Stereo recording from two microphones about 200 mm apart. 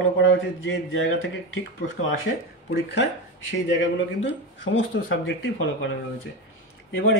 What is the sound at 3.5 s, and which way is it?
A man's voice, 65° left (ahead or behind).